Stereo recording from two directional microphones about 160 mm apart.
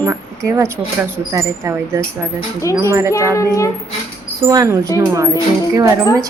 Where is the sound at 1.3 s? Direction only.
15° right (ahead or behind).